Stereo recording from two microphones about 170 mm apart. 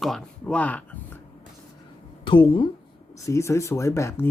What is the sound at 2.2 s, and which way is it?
Speech, 30° left (ahead or behind).